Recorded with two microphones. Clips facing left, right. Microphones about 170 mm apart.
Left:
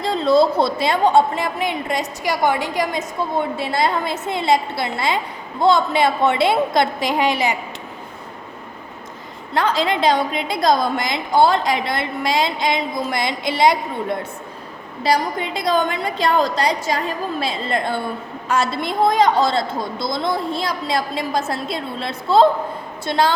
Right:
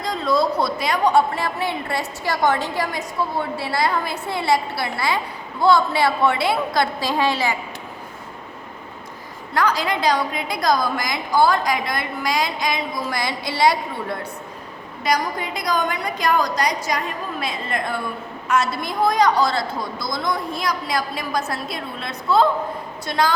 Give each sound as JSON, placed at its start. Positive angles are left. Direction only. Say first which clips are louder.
{"t": 0.0, "sound": "a woman's voice", "louder": "left 5 dB", "side_deg": 25}
{"t": 9.6, "sound": "a woman's voice", "louder": "left 2 dB", "side_deg": 25}